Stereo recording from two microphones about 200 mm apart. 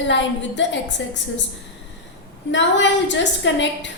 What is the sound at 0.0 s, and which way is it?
A woman's voice, 65° left (ahead or behind).